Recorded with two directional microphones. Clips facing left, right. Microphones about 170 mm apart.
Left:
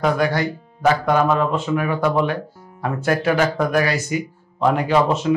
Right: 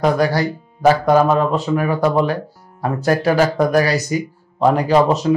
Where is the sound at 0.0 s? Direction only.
35° right (ahead or behind).